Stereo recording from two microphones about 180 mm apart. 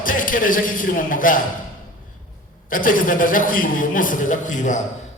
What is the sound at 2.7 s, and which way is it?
A man's voice, 50° left (ahead or behind).